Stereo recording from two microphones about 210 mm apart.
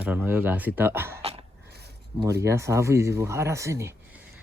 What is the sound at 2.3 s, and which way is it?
Speech, 15° right (ahead or behind).